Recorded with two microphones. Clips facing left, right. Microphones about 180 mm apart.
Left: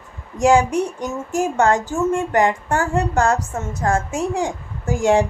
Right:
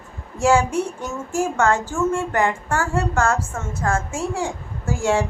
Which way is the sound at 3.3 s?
35° left (ahead or behind).